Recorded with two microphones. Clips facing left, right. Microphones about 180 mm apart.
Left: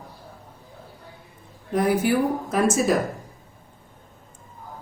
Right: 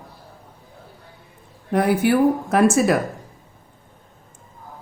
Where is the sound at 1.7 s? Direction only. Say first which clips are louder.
Right 3 dB; 65° right (ahead or behind).